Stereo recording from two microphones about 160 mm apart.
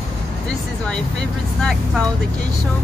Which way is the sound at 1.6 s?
5° left (ahead or behind).